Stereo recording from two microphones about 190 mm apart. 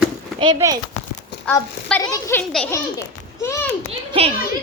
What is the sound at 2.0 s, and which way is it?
Speech, 15° left (ahead or behind).